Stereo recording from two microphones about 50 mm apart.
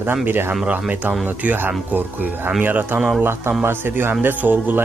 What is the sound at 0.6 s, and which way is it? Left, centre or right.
Speech, right.